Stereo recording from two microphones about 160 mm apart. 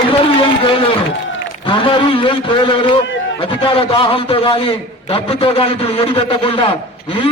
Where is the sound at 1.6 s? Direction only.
30° left (ahead or behind).